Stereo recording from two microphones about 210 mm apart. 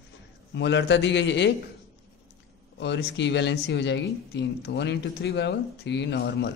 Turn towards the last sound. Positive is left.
turn(degrees=55)  # may be behind; listen again after turning